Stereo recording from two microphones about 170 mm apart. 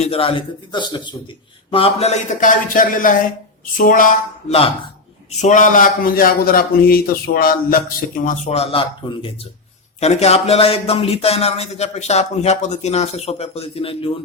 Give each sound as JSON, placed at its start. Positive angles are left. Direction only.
{"t": 0.0, "sound": "a man's voice", "side_deg": 35}
{"t": 8.2, "sound": "speech", "side_deg": 45}